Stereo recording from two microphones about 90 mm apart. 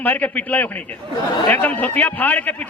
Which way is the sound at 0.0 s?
20° left (ahead or behind).